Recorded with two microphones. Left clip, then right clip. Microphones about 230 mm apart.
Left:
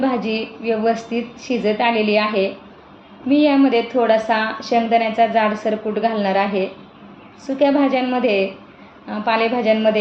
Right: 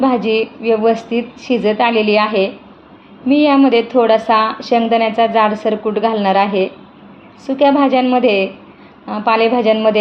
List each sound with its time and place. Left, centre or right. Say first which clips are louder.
0.0 s a woman's voice: right 7 dB; right